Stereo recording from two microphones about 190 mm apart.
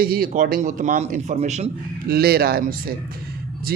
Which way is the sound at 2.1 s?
55° right (ahead or behind).